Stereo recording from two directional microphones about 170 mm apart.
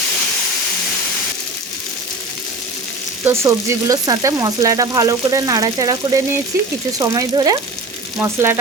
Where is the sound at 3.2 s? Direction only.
15° right (ahead or behind).